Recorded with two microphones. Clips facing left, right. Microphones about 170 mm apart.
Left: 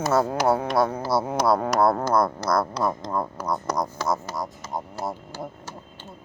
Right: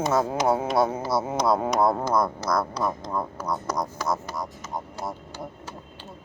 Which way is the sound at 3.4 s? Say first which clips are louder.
Left 2 dB; 10° left (ahead or behind).